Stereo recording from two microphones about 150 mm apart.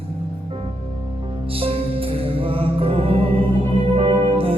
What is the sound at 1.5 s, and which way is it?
Music, 40° right (ahead or behind).